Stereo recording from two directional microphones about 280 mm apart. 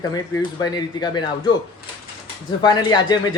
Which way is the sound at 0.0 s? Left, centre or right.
Centre.